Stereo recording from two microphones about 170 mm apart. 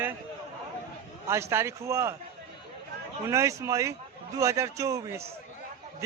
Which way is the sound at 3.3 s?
15° right (ahead or behind).